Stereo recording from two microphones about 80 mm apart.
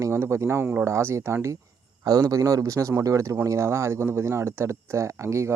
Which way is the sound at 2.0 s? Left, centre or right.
Right.